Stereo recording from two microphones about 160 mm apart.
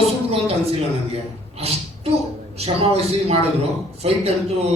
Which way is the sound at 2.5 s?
40° right (ahead or behind).